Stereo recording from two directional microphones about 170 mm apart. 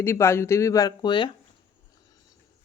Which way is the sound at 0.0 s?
15° left (ahead or behind).